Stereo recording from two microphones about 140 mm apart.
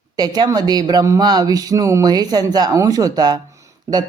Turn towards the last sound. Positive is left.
turn(degrees=-25)  # may be behind; listen again after turning